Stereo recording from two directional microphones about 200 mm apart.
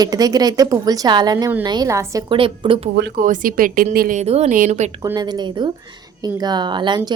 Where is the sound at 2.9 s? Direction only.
60° right (ahead or behind).